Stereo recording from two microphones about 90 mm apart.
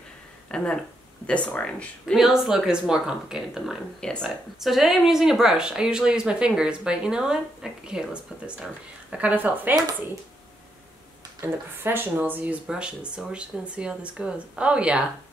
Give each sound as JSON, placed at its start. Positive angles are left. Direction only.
{"t": 0.5, "sound": "speech", "side_deg": 10}
{"t": 2.1, "sound": "speech", "side_deg": -5}
{"t": 4.0, "sound": "speech", "side_deg": 10}
{"t": 4.6, "sound": "speech", "side_deg": 0}
{"t": 11.4, "sound": "speech", "side_deg": -25}